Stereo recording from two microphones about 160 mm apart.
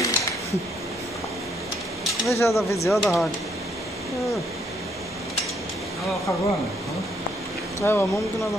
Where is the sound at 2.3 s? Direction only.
15° left (ahead or behind).